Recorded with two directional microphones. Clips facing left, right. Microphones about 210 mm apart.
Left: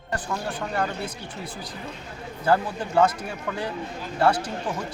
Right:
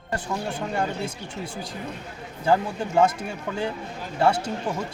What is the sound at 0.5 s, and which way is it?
Speech, 25° right (ahead or behind).